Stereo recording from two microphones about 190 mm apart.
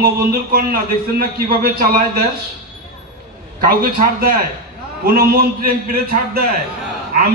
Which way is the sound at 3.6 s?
50° right (ahead or behind).